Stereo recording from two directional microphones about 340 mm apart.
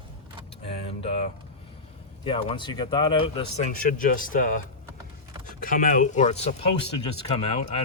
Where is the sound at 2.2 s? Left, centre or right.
Centre.